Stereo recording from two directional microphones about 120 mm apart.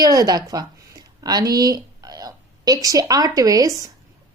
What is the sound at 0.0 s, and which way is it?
A woman's voice, 30° right (ahead or behind).